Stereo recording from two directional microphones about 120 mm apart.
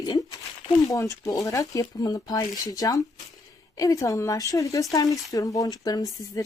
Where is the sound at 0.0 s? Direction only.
35° left (ahead or behind).